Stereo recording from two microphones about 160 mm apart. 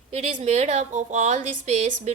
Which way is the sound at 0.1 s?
45° right (ahead or behind).